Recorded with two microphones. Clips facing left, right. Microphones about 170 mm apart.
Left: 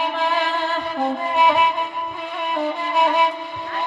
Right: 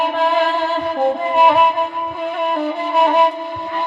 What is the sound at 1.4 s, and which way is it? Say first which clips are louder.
Music: right 4 dB; 55° right (ahead or behind).